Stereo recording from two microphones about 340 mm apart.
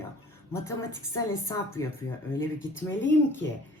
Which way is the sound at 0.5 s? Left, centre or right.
Centre.